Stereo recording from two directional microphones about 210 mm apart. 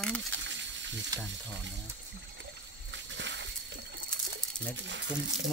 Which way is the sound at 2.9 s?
55° right (ahead or behind).